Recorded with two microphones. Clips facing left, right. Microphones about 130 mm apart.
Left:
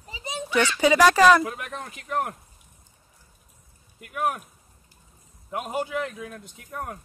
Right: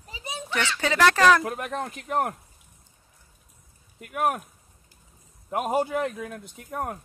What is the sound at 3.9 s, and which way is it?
Speech, 50° right (ahead or behind).